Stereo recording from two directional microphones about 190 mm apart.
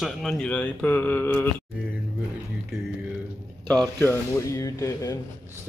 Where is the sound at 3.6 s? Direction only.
5° left (ahead or behind).